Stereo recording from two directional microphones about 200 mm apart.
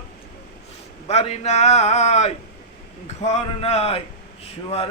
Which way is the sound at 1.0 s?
30° left (ahead or behind).